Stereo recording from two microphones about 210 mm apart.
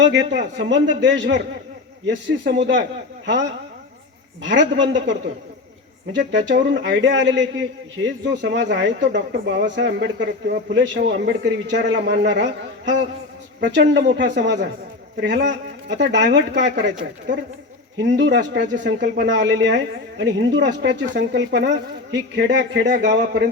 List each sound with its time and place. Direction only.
0.0 s speech: 60° right (ahead or behind)
4.4 s speech: 60° right (ahead or behind)
6.1 s speech: 60° right (ahead or behind)
17.9 s speech: 55° right (ahead or behind)